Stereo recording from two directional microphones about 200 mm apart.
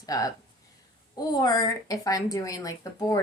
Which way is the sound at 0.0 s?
20° left (ahead or behind).